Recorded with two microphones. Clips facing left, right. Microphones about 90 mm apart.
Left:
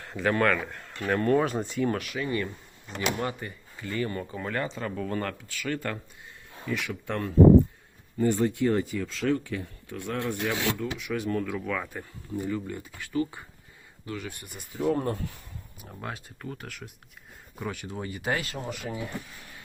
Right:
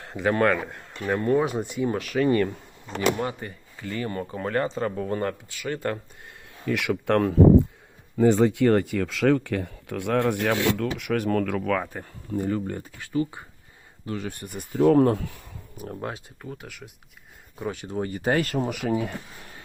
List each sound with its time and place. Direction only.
0.2 s a man's voice: 25° right (ahead or behind)
1.0 s speech: 15° right (ahead or behind)
2.0 s speech: 40° right (ahead or behind)
3.2 s speech: 30° right (ahead or behind)
6.7 s speech: 90° right; by 10.6 s 65° right (ahead or behind)
10.7 s speech: 80° right
11.4 s speech: 60° right (ahead or behind)
12.3 s speech: 45° right (ahead or behind)
14.0 s speech: 30° right (ahead or behind); by 15.2 s 90° right
16.0 s a man's voice: 25° right (ahead or behind)
16.4 s speech: 10° right (ahead or behind)
17.7 s speech: 30° right (ahead or behind)
18.7 s speech: 70° right (ahead or behind)